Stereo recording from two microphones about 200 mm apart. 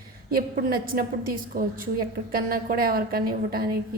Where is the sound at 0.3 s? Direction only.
45° right (ahead or behind).